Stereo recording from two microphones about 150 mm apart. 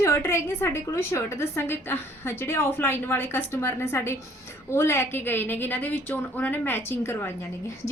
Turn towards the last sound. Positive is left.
turn(degrees=15)  # may be behind; listen again after turning